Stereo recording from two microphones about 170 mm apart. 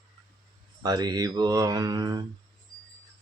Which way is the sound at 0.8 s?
20° right (ahead or behind).